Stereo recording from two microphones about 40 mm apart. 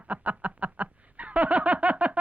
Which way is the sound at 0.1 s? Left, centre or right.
Right.